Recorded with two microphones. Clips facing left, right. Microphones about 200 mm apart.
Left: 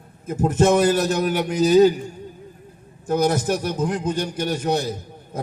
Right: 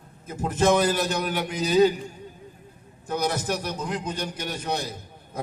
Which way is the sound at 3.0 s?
45° left (ahead or behind).